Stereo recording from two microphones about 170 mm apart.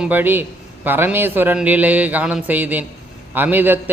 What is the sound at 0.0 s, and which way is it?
A man's voice, 10° right (ahead or behind).